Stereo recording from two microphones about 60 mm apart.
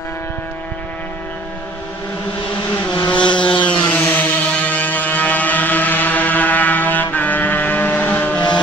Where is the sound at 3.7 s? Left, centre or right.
Left.